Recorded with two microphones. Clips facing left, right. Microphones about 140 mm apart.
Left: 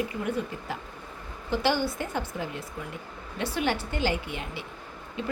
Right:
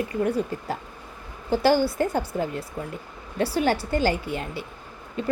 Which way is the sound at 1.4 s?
40° right (ahead or behind).